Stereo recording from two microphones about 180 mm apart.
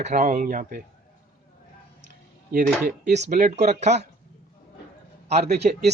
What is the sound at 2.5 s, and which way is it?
Speech, 50° right (ahead or behind).